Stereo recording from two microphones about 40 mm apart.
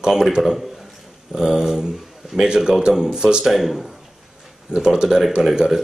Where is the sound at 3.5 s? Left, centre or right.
Centre.